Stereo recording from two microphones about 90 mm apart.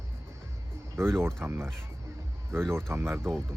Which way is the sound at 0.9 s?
30° right (ahead or behind).